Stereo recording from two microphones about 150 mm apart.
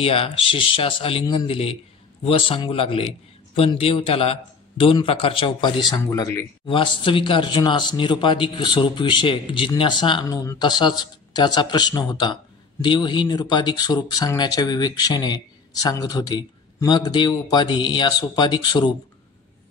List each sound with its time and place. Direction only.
0.0 s a man's voice: 40° left (ahead or behind); by 6.4 s 20° left (ahead or behind)
6.6 s speech: 35° left (ahead or behind)